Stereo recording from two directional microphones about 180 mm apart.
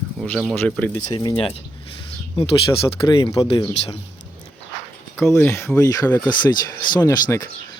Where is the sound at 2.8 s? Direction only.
25° left (ahead or behind).